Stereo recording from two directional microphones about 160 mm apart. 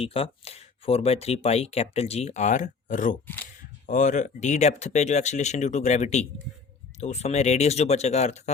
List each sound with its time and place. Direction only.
0.0 s speech: 35° left (ahead or behind)